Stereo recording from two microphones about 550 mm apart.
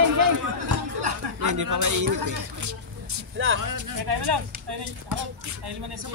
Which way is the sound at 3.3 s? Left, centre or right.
Right.